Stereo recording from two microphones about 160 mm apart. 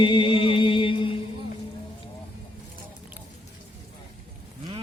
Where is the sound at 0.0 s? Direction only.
30° left (ahead or behind).